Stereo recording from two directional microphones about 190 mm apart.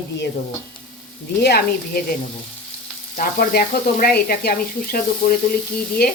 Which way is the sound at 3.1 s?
50° left (ahead or behind).